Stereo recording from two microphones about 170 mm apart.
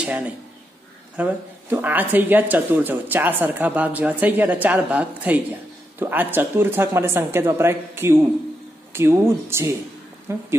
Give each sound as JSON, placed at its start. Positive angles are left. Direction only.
{"t": 0.0, "sound": "speech", "side_deg": -5}